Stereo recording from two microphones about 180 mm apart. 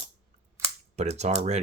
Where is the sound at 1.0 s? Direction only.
40° right (ahead or behind).